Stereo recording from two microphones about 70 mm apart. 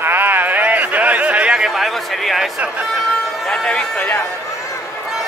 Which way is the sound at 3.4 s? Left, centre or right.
Centre.